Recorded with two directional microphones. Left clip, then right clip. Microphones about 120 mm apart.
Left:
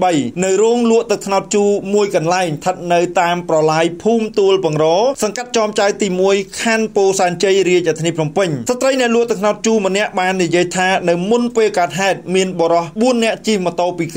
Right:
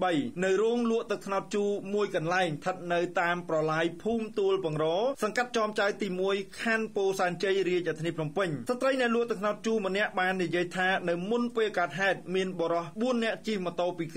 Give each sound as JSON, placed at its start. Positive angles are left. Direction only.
{"t": 0.0, "sound": "a man's voice", "side_deg": 20}